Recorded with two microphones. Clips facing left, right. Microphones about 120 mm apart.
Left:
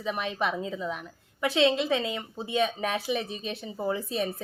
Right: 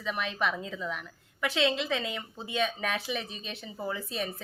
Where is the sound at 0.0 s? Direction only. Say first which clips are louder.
Left 2 dB; 20° left (ahead or behind).